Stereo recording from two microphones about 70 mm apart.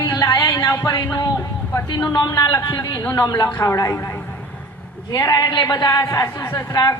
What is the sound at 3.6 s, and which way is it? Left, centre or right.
Speech, left.